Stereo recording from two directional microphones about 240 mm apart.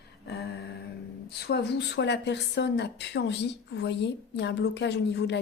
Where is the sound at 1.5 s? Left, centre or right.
Left.